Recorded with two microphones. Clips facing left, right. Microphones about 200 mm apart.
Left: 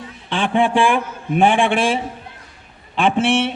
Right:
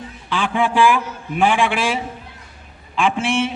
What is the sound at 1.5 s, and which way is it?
Speech, 55° left (ahead or behind).